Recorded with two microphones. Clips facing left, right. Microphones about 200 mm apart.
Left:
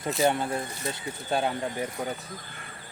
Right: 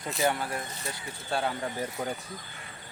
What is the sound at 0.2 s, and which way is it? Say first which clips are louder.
Speech: left 3 dB; 20° left (ahead or behind).